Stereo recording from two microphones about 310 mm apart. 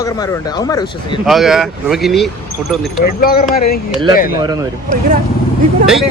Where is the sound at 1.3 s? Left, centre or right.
Centre.